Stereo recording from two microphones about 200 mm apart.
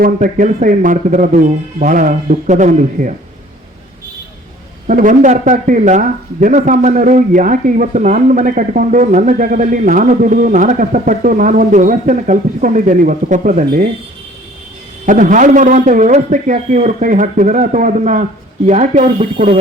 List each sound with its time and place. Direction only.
0.0 s speech: 40° right (ahead or behind)
4.9 s speech: 40° right (ahead or behind)
15.0 s speech: 40° right (ahead or behind)